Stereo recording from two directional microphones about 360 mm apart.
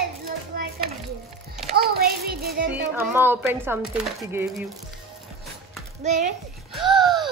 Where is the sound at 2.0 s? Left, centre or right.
Right.